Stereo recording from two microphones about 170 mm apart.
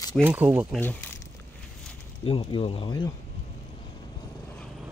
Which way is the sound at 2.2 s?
30° left (ahead or behind).